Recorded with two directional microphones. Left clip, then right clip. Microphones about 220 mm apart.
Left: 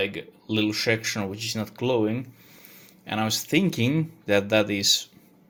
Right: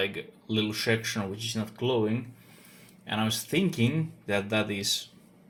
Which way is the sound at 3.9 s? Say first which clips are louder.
Left 7 dB; 55° left (ahead or behind).